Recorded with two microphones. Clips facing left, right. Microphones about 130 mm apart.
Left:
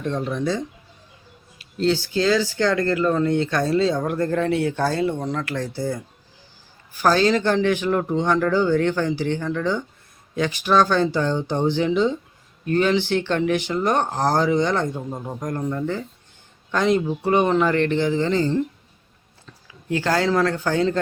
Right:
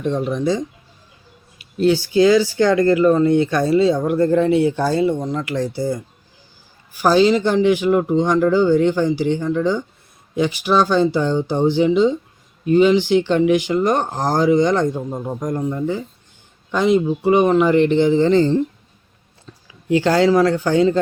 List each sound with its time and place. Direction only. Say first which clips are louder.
0.0 s speech: right 4 dB; 15° right (ahead or behind)
4.2 s speech: right 8 dB; 25° right (ahead or behind)
4.4 s speech: right 5 dB; 10° right (ahead or behind)
19.9 s speech: right 6 dB; 20° right (ahead or behind)